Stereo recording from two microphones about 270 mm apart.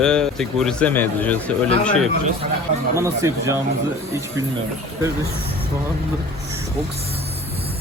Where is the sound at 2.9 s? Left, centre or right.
Centre.